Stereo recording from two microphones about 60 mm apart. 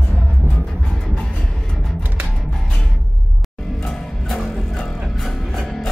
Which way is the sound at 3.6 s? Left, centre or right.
Centre.